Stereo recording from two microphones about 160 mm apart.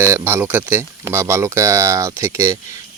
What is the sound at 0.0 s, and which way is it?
Speech, 15° right (ahead or behind).